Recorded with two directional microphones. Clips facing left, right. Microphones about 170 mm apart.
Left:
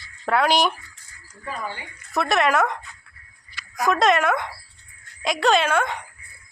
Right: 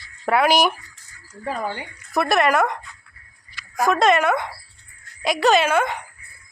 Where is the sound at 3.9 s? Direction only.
Centre (ahead or behind).